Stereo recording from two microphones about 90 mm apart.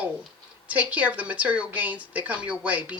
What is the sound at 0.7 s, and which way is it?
Speech, 15° right (ahead or behind).